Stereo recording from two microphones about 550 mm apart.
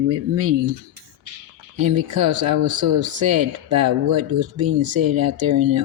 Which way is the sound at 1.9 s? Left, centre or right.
Right.